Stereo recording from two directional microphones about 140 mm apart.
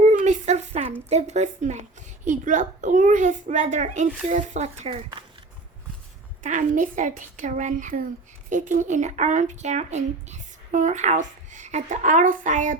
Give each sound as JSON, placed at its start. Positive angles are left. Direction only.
{"t": 0.0, "sound": "a sound", "side_deg": -60}
{"t": 1.1, "sound": "speech", "side_deg": -55}
{"t": 6.4, "sound": "speech", "side_deg": -65}